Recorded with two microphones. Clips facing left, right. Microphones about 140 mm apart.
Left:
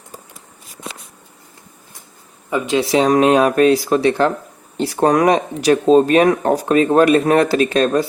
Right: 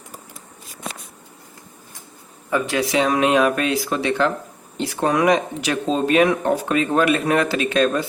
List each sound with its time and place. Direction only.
2.5 s speech: 20° left (ahead or behind)
2.8 s speech: 35° left (ahead or behind)